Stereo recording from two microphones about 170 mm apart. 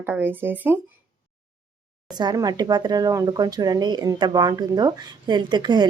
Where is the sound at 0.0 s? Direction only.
10° right (ahead or behind).